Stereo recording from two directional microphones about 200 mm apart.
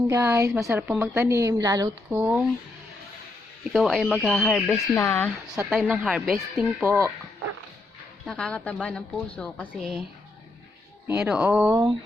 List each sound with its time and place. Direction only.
0.1 s a woman's voice: 15° right (ahead or behind)
2.0 s speech: 5° right (ahead or behind)
3.7 s speech: centre (ahead or behind)
4.7 s speech: 15° left (ahead or behind)
5.6 s speech: centre (ahead or behind)
6.8 s a woman's voice: 15° right (ahead or behind)
8.3 s speech: 5° left (ahead or behind)
11.2 s speech: 5° right (ahead or behind)